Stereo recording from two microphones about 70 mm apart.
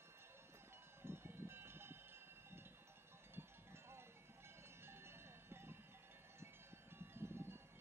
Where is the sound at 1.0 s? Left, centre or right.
Right.